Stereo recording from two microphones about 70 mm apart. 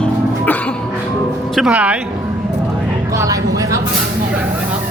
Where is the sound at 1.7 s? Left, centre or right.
Centre.